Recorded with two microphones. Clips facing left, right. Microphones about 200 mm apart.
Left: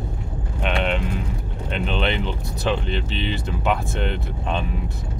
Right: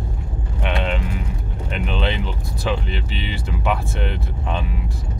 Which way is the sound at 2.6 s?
10° right (ahead or behind).